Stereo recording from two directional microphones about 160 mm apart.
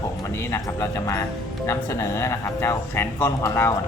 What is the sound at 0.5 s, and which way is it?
Speech, 20° left (ahead or behind).